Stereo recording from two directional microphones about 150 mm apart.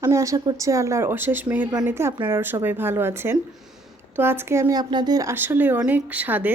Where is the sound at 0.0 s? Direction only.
20° right (ahead or behind).